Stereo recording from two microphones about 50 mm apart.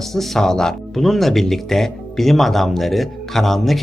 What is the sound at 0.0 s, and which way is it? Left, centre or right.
Speech, centre.